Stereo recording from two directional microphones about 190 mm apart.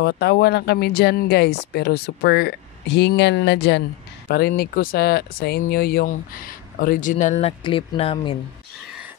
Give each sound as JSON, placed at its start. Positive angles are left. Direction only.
{"t": 0.0, "sound": "speech", "side_deg": 60}
{"t": 4.3, "sound": "speech", "side_deg": 50}